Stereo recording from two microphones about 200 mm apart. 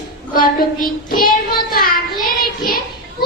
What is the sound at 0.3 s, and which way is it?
Child singing, 45° left (ahead or behind).